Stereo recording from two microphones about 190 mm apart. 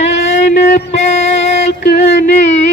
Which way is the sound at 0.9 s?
35° left (ahead or behind).